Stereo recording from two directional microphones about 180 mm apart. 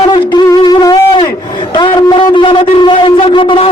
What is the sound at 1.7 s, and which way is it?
Shofar, 25° left (ahead or behind).